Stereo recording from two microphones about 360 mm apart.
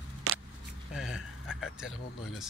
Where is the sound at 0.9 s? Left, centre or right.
Centre.